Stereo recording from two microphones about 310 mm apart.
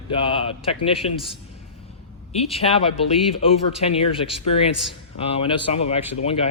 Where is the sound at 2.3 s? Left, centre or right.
Centre.